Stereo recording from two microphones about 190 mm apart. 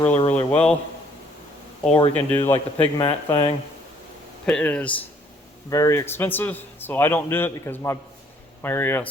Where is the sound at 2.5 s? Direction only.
30° left (ahead or behind).